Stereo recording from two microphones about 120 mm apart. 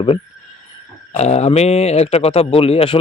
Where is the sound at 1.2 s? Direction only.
65° left (ahead or behind).